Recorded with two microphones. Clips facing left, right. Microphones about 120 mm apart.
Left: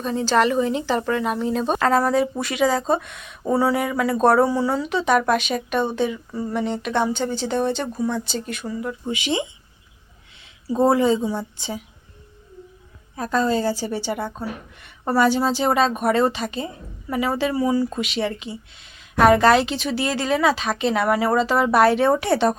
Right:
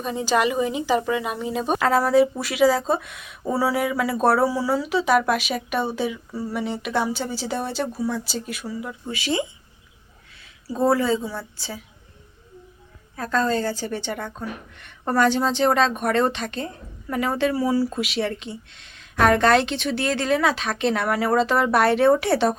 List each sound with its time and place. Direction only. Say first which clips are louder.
0.0 s a woman's voice: left 2 dB; 10° right (ahead or behind)
9.0 s speech: even; 20° left (ahead or behind)
13.1 s a woman's voice: left 2 dB; 15° left (ahead or behind)